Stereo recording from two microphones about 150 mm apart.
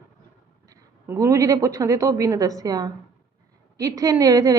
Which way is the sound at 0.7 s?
20° right (ahead or behind).